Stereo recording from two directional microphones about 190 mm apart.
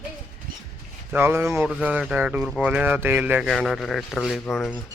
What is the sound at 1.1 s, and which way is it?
Speech, 10° right (ahead or behind).